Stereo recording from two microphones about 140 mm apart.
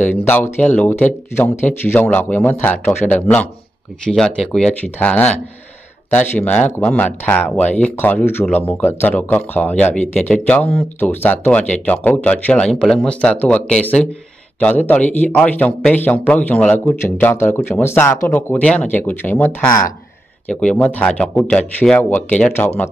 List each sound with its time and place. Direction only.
0.1 s speech: 15° left (ahead or behind)